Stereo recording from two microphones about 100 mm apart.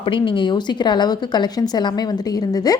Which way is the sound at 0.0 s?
60° left (ahead or behind).